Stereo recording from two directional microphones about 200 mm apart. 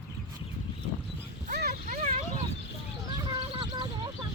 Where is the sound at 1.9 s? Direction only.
35° right (ahead or behind).